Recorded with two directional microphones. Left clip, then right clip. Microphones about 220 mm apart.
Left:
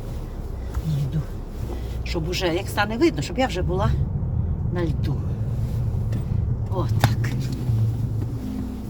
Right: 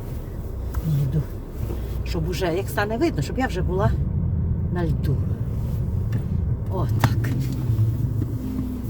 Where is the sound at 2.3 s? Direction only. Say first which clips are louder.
Even; 15° right (ahead or behind).